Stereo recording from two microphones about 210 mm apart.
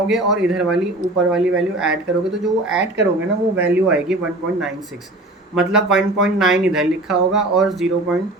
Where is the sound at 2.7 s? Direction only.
55° right (ahead or behind).